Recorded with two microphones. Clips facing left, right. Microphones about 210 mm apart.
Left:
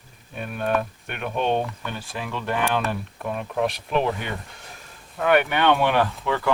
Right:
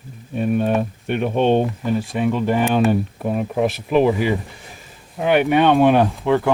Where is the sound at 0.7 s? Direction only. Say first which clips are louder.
Right 5 dB; 30° right (ahead or behind).